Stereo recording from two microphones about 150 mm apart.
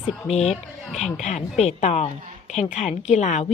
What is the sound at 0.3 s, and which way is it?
A woman's voice, 45° left (ahead or behind).